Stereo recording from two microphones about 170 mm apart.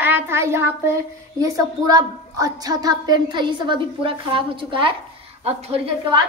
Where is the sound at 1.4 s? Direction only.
20° right (ahead or behind); by 5.8 s 35° right (ahead or behind).